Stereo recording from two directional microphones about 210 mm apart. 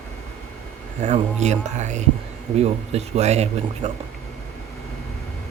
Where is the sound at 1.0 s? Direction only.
35° right (ahead or behind).